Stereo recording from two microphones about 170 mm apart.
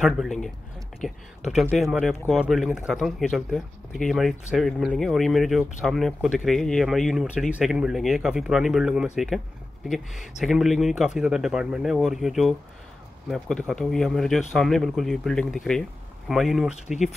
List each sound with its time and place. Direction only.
0.0 s speech: centre (ahead or behind)
16.7 s speech: 40° left (ahead or behind)